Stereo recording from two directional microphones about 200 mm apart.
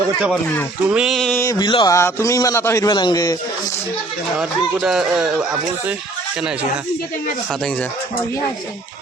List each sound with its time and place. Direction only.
0.9 s speech: 5° right (ahead or behind)
1.5 s a man's voice: 20° left (ahead or behind)
4.4 s speech: 5° right (ahead or behind)